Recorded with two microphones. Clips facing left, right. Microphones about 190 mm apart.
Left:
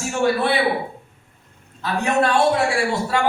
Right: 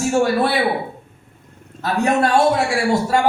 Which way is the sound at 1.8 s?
45° right (ahead or behind).